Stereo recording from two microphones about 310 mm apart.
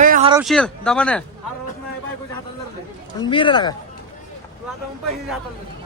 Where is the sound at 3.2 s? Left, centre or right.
Centre.